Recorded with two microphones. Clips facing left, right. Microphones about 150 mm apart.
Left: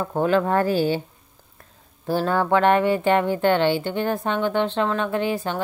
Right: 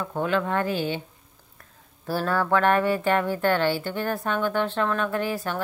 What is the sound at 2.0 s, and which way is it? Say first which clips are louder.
Speech: left 3 dB; 25° left (ahead or behind).